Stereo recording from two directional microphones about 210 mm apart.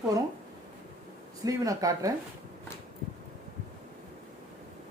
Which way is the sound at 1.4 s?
15° right (ahead or behind).